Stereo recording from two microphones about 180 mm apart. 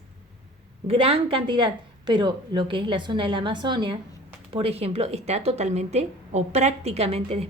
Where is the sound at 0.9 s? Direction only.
30° right (ahead or behind).